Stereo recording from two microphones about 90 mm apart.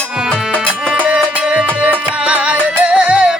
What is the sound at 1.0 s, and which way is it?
Music, 10° right (ahead or behind).